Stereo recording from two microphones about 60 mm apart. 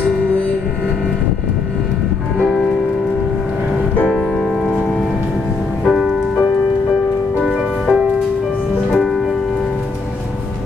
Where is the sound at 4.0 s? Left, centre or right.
Left.